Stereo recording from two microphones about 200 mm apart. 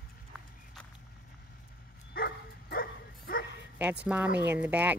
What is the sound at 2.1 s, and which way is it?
Bow-wow, 50° left (ahead or behind).